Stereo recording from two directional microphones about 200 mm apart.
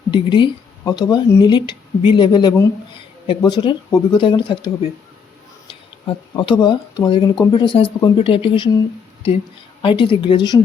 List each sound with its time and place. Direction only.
0.1 s speech: 25° left (ahead or behind)
9.8 s speech: 25° left (ahead or behind)